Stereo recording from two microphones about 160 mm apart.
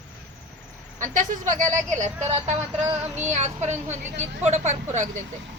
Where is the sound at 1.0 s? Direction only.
55° right (ahead or behind).